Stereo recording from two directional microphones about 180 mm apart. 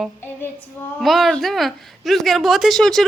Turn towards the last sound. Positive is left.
turn(degrees=0)  # may be behind; listen again after turning